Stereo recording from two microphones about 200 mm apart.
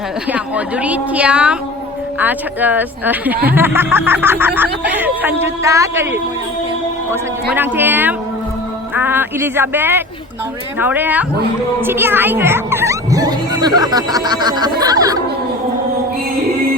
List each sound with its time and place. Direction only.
0.3 s speech: 5° right (ahead or behind)